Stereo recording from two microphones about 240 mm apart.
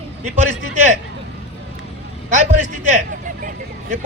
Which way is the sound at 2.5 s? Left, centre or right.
Left.